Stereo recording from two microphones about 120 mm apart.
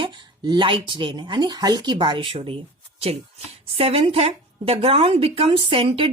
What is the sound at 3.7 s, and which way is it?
A woman's voice, 55° right (ahead or behind).